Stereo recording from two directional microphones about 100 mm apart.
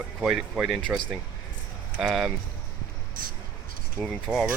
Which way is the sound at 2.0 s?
5° right (ahead or behind).